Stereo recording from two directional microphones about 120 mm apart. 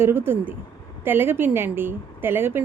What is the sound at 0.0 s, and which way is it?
A woman's voice, 20° right (ahead or behind).